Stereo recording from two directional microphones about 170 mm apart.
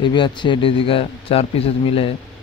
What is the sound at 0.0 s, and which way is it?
A man's voice, 30° left (ahead or behind).